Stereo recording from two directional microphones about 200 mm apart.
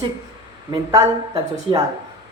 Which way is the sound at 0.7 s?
20° right (ahead or behind).